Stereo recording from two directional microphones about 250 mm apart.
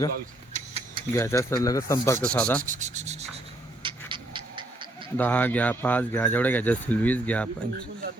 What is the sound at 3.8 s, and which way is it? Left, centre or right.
Cat, centre.